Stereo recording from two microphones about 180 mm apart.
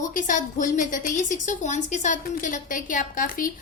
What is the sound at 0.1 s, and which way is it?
A woman's voice, 45° left (ahead or behind).